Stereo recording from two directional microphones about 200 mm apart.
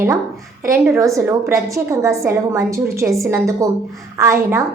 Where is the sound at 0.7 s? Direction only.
15° right (ahead or behind).